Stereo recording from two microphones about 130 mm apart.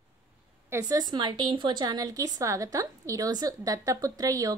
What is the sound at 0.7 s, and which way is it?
A woman's voice, 25° right (ahead or behind).